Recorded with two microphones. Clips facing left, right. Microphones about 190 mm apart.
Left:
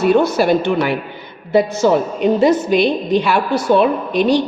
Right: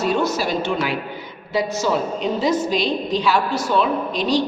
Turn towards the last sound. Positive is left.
turn(degrees=60)  # may be behind; listen again after turning